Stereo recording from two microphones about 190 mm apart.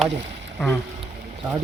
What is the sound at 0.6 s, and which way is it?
Speech, centre (ahead or behind).